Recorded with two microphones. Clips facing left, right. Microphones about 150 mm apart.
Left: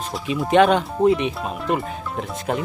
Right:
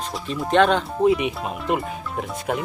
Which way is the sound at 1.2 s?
10° right (ahead or behind).